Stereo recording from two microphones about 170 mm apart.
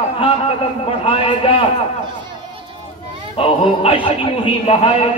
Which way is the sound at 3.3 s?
35° left (ahead or behind).